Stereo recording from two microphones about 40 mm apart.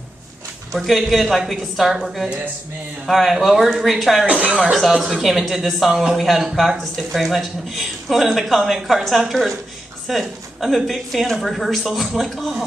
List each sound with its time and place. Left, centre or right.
0.7 s speech: centre
4.3 s speech: right
5.0 s a woman's voice: centre